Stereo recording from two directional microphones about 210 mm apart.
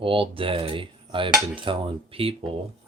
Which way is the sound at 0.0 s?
25° right (ahead or behind).